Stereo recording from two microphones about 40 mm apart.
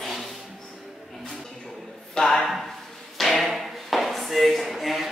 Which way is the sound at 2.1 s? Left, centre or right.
Centre.